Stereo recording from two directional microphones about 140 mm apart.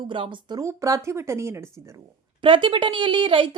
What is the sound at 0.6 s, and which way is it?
Speech, 20° right (ahead or behind).